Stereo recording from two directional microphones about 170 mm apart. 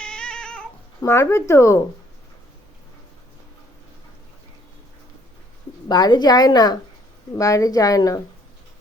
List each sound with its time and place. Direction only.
0.0 s cat: 5° left (ahead or behind)
1.1 s speech: 15° left (ahead or behind)
5.9 s a woman's voice: 25° left (ahead or behind)